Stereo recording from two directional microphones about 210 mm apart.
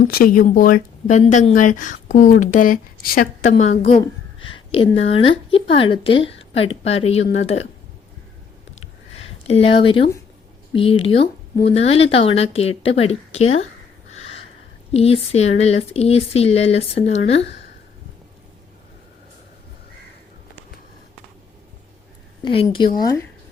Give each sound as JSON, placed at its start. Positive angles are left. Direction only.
{"t": 0.0, "sound": "speech", "side_deg": 45}
{"t": 3.5, "sound": "speech", "side_deg": 30}
{"t": 5.5, "sound": "speech", "side_deg": 25}
{"t": 9.4, "sound": "speech", "side_deg": 30}
{"t": 14.1, "sound": "owl", "side_deg": 30}
{"t": 14.9, "sound": "speech", "side_deg": 30}
{"t": 22.4, "sound": "speech", "side_deg": 25}